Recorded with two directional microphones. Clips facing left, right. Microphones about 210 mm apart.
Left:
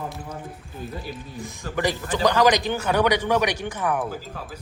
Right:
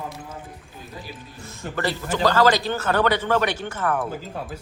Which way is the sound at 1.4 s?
15° left (ahead or behind).